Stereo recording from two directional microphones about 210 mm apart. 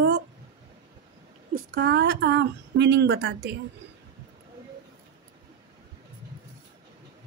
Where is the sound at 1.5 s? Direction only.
50° right (ahead or behind).